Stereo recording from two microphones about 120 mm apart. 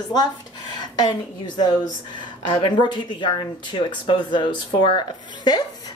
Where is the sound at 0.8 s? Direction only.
40° left (ahead or behind).